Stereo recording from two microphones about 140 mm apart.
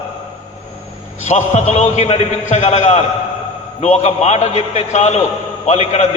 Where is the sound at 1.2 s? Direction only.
55° left (ahead or behind).